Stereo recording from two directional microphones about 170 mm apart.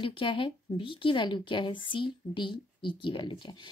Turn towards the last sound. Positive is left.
turn(degrees=30)  # may be behind; listen again after turning